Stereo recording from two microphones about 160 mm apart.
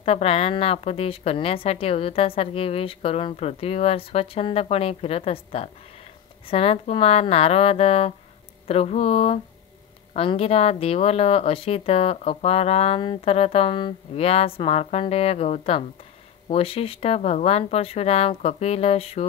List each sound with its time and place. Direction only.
0.0 s speech: 40° left (ahead or behind)